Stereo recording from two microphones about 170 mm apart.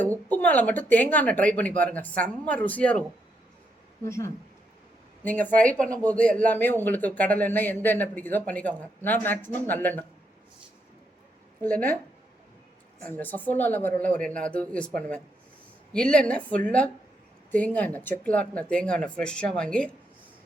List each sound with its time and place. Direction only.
0.3 s speech: 10° left (ahead or behind)
4.0 s speech: 15° left (ahead or behind)
11.6 s speech: 10° left (ahead or behind)
13.0 s speech: 10° left (ahead or behind)